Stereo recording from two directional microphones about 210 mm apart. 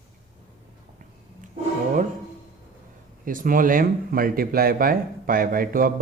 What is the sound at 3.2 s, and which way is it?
A man's voice, 40° right (ahead or behind).